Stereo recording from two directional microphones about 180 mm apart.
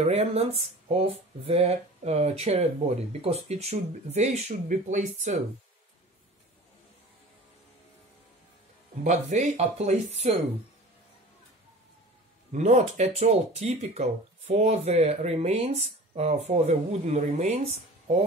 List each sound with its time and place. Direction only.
0.0 s speech: 35° right (ahead or behind)
9.0 s speech: 40° right (ahead or behind)
12.5 s speech: 40° right (ahead or behind)